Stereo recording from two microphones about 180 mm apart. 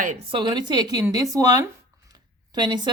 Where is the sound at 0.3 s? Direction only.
25° right (ahead or behind).